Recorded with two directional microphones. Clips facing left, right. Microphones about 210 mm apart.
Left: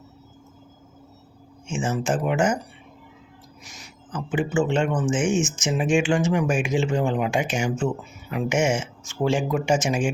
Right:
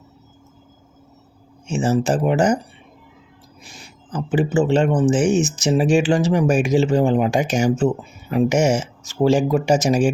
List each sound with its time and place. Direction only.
1.6 s speech: 40° right (ahead or behind)
3.6 s speech: 30° right (ahead or behind)